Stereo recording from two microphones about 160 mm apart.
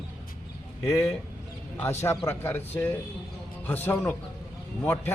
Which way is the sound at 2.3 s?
15° left (ahead or behind).